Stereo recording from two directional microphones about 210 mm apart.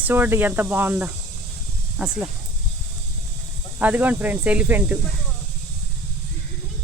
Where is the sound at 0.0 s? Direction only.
10° right (ahead or behind).